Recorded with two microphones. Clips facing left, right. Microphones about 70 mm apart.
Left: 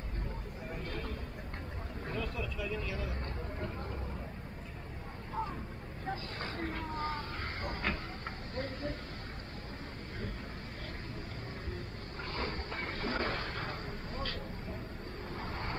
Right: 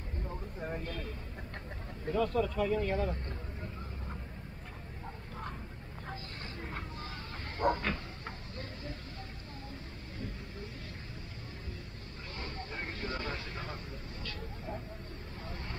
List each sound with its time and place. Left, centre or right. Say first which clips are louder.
0.8 s a sound: even; left
2.1 s speech: right 10 dB; right
6.9 s vehicle: left 8 dB; left
7.6 s speech: right 14 dB; right
12.4 s vehicle: left 2 dB; left